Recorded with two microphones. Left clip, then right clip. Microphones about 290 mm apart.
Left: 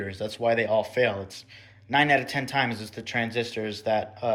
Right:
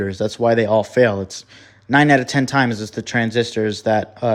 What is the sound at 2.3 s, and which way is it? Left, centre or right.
Speech, right.